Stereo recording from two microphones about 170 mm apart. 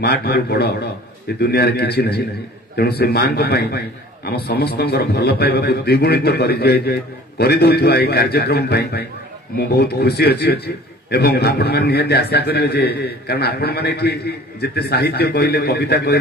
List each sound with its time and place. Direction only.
0.0 s a man's voice: 70° left (ahead or behind)